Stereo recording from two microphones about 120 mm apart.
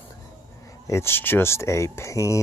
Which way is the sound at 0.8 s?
20° left (ahead or behind).